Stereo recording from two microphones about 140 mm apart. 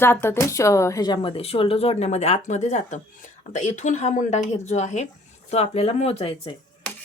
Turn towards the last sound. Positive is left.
turn(degrees=45)  # may be behind; listen again after turning